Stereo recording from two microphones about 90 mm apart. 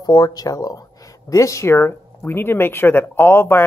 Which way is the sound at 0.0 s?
45° left (ahead or behind).